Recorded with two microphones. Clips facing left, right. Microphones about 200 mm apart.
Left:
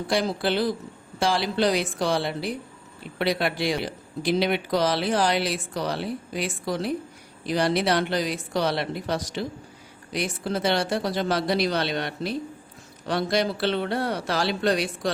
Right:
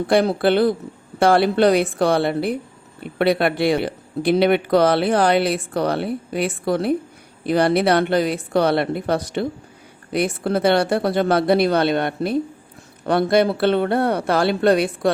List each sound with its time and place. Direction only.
0.1 s speech: 60° right (ahead or behind)